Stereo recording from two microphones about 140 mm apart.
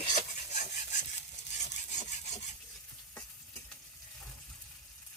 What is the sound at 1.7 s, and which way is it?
Wood, 55° left (ahead or behind).